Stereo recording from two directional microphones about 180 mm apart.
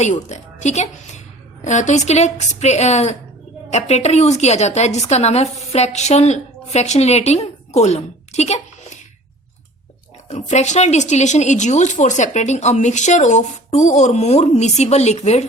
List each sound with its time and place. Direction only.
0.0 s a woman's voice: 40° left (ahead or behind)
10.2 s speech: 40° left (ahead or behind)